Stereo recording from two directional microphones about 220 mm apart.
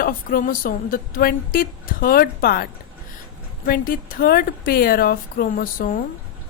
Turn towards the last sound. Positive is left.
turn(degrees=40)  # may be behind; listen again after turning